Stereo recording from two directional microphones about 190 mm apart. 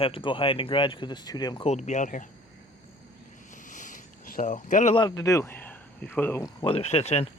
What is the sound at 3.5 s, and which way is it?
Vehicle, 40° left (ahead or behind).